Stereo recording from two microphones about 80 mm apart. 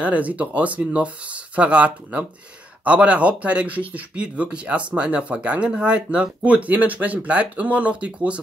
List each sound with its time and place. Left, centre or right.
0.0 s speech: centre